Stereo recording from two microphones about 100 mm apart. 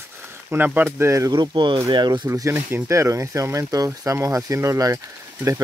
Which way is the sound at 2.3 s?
25° right (ahead or behind).